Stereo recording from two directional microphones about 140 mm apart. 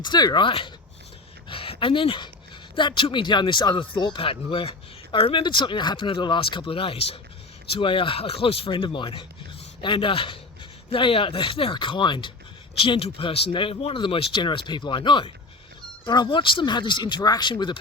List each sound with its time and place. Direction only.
0.0 s speech: 30° left (ahead or behind)
1.5 s dog: 40° left (ahead or behind)
2.7 s a man's voice: 35° left (ahead or behind)